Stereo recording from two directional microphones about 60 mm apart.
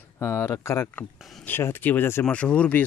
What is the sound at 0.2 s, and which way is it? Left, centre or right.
Speech, left.